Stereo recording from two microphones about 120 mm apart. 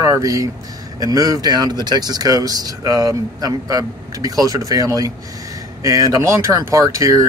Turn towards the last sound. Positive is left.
turn(degrees=-30)  # may be behind; listen again after turning